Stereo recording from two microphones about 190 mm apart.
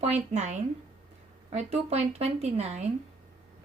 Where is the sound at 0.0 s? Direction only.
35° right (ahead or behind).